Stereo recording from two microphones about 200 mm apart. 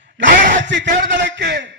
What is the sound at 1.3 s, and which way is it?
Speech, 55° right (ahead or behind).